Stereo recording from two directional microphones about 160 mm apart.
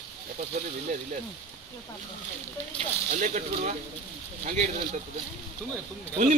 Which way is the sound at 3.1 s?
50° right (ahead or behind).